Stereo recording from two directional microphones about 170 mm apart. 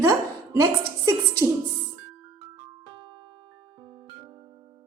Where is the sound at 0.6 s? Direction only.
20° right (ahead or behind).